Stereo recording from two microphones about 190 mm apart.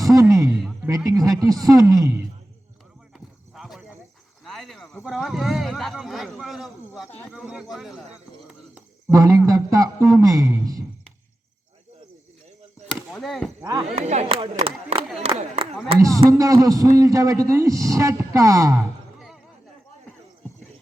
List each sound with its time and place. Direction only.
0.0 s a man's voice: 15° right (ahead or behind)
3.5 s a sound: centre (ahead or behind)
5.0 s a man's voice: centre (ahead or behind); by 10.8 s 20° right (ahead or behind)
13.1 s chop: centre (ahead or behind)
13.6 s speech: 20° right (ahead or behind)
13.9 s speech: 35° right (ahead or behind)
16.0 s a man's voice: 15° right (ahead or behind)